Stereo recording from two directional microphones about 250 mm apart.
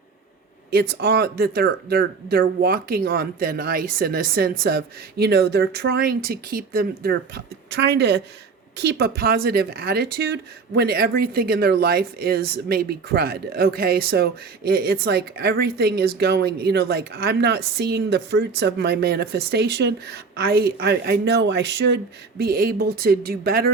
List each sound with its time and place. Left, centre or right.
0.7 s speech: right